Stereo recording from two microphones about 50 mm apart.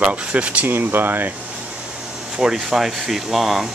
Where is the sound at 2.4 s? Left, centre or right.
Centre.